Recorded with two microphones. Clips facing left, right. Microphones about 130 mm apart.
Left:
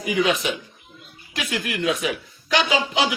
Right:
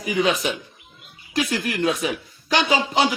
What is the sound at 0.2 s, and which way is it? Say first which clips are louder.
Speech: right 1 dB; 35° right (ahead or behind).